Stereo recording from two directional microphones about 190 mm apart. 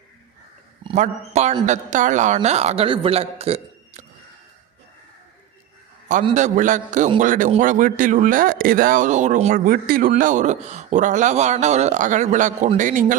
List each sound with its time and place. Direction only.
0.9 s speech: 40° right (ahead or behind)
6.3 s speech: 40° right (ahead or behind)